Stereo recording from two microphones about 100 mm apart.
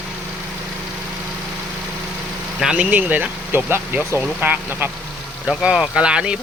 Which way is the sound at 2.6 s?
10° right (ahead or behind).